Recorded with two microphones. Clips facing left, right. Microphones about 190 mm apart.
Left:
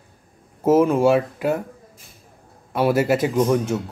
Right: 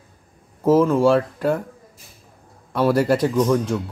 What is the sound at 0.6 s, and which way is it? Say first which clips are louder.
Speech: even; 20° left (ahead or behind).